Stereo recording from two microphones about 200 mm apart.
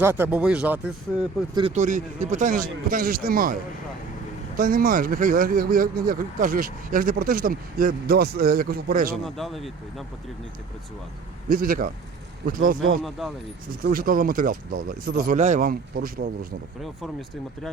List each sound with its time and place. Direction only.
0.0 s speech: 10° right (ahead or behind)
1.7 s speech: 40° right (ahead or behind)
9.2 s speech: centre (ahead or behind)
11.4 s speech: 45° right (ahead or behind)
13.0 s speech: centre (ahead or behind)
13.8 s speech: 45° right (ahead or behind)
16.8 s speech: centre (ahead or behind)